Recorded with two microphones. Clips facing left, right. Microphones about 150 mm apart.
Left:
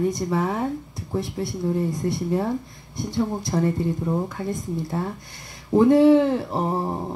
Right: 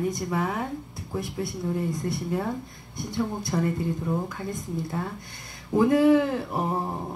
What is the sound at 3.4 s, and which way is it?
Speech, 30° left (ahead or behind).